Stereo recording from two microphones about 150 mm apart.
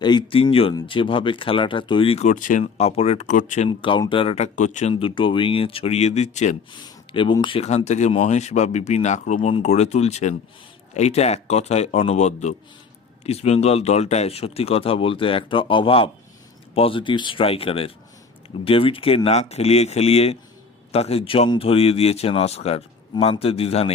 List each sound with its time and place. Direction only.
0.0 s speech: 30° left (ahead or behind); by 3.7 s 55° left (ahead or behind)
3.7 s speech: 35° left (ahead or behind); by 4.9 s 55° left (ahead or behind)
4.9 s speech: 35° left (ahead or behind); by 6.6 s 50° left (ahead or behind)
6.8 s a sound: 35° left (ahead or behind)
7.4 s speech: 40° left (ahead or behind)